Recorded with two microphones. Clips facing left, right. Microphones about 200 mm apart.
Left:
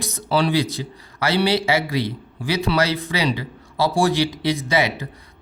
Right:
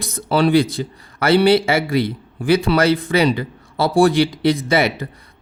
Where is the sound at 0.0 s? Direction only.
55° right (ahead or behind).